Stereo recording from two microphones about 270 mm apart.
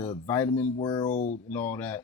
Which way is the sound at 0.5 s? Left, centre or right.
Centre.